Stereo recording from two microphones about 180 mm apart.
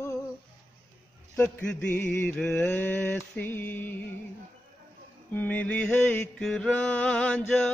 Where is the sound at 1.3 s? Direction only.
5° left (ahead or behind).